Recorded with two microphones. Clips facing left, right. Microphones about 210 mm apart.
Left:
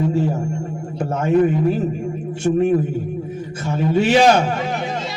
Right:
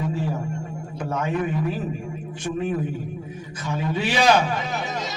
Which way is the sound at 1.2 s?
45° left (ahead or behind).